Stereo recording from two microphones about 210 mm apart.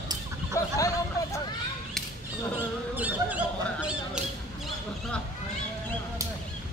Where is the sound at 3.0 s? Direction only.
5° right (ahead or behind).